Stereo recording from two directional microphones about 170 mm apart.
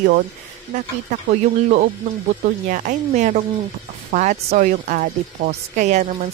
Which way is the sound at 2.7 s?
50° right (ahead or behind).